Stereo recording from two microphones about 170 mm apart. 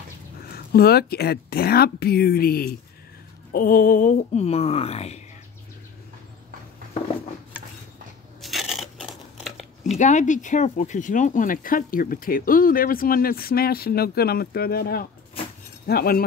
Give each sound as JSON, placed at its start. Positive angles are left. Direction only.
{"t": 0.5, "sound": "speech", "side_deg": 65}
{"t": 8.4, "sound": "coin", "side_deg": 0}
{"t": 9.9, "sound": "speech", "side_deg": 45}